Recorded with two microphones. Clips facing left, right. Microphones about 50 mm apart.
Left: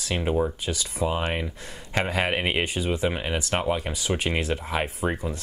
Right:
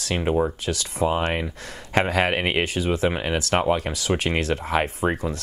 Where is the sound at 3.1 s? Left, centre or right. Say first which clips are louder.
Right 3 dB; right.